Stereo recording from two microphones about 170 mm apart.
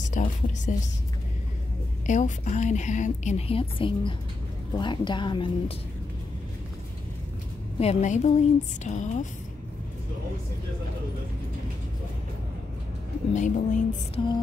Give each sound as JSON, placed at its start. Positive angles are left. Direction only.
{"t": 0.1, "sound": "a woman's voice", "side_deg": 45}
{"t": 2.0, "sound": "a woman's voice", "side_deg": 45}
{"t": 7.8, "sound": "a woman's voice", "side_deg": 40}
{"t": 13.3, "sound": "a woman's voice", "side_deg": 45}